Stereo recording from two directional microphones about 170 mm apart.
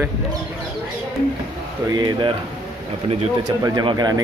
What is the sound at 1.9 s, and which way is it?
A man's voice, 25° right (ahead or behind).